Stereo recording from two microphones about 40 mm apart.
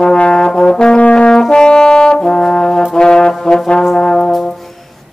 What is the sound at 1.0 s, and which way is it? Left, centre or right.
Brass instrument, left.